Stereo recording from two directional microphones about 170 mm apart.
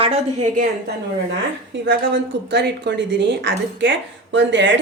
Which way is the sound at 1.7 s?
90° right.